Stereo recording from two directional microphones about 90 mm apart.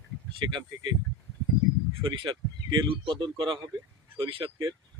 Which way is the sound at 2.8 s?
90° right.